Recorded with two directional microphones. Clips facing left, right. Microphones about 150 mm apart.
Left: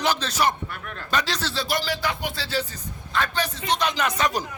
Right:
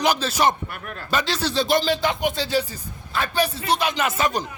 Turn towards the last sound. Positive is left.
turn(degrees=-5)  # may be behind; listen again after turning